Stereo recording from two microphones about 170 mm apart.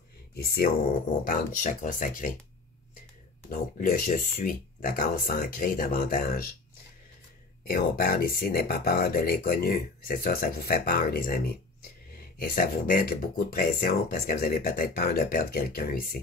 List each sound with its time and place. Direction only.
0.4 s speech: 65° left (ahead or behind)
3.4 s speech: 55° left (ahead or behind)
7.6 s speech: 60° left (ahead or behind)